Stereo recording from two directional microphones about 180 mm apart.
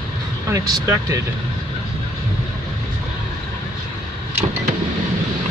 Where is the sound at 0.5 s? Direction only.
20° right (ahead or behind).